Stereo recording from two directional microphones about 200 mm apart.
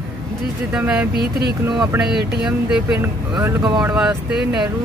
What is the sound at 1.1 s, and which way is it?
Speech, 50° right (ahead or behind).